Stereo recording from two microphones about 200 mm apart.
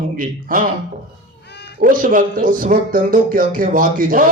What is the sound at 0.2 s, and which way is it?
Speech, 45° right (ahead or behind).